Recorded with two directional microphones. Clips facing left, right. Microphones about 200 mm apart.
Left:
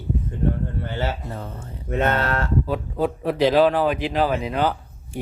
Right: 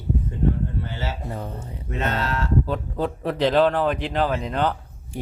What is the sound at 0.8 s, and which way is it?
Speech, 55° left (ahead or behind).